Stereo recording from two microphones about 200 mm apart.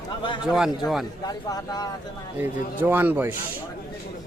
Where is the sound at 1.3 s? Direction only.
20° left (ahead or behind).